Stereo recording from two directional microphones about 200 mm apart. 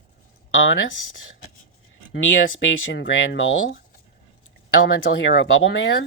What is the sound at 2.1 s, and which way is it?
Speech, 70° left (ahead or behind).